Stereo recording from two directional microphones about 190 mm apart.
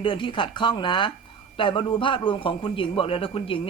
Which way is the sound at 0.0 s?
25° left (ahead or behind).